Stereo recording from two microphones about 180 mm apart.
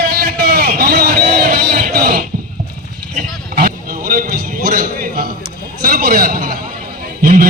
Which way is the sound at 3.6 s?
55° right (ahead or behind).